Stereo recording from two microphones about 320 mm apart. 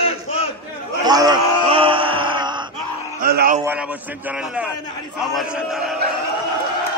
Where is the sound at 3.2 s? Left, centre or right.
Right.